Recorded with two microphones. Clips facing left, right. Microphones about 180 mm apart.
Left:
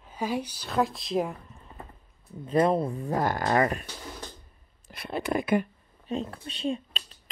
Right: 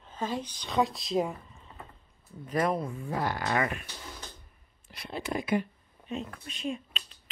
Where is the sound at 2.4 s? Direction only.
25° left (ahead or behind).